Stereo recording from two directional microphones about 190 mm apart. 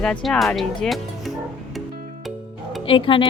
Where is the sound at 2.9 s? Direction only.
25° left (ahead or behind).